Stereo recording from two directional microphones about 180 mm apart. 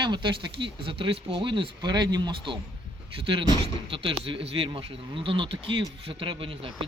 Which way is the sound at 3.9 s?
35° right (ahead or behind).